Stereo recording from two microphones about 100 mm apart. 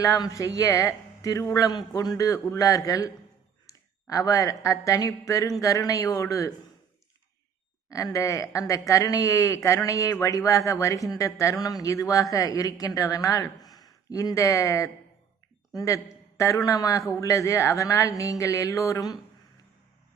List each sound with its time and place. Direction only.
0.0 s speech: 35° left (ahead or behind)
7.9 s a woman's voice: 35° left (ahead or behind)